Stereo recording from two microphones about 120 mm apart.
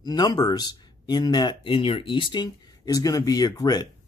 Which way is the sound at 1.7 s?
50° left (ahead or behind).